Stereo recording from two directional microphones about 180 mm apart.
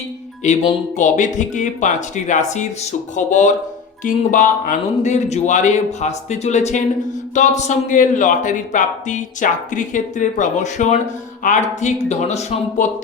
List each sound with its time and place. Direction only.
0.4 s a man's voice: 40° left (ahead or behind)